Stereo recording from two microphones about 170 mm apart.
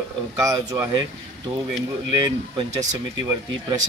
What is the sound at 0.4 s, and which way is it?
Speech, 20° right (ahead or behind).